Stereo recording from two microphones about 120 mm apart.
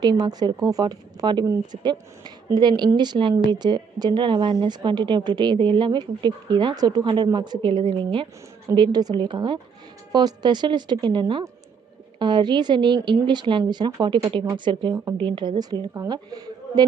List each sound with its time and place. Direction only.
0.0 s a woman's voice: 35° right (ahead or behind)